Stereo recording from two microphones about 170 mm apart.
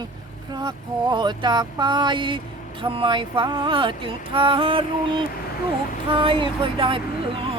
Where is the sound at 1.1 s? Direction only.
25° right (ahead or behind).